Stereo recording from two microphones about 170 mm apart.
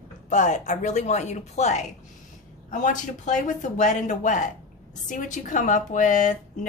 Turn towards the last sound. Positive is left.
turn(degrees=45)  # may be behind; listen again after turning